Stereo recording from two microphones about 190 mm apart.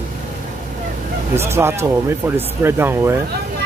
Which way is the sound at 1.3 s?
15° right (ahead or behind).